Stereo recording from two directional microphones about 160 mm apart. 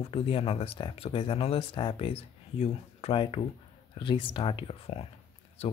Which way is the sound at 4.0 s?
30° left (ahead or behind).